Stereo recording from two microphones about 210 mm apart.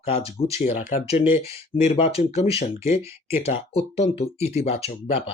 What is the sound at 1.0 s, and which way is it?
Speech, 15° right (ahead or behind).